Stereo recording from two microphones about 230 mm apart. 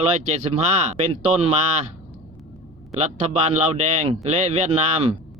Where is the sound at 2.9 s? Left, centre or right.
Right.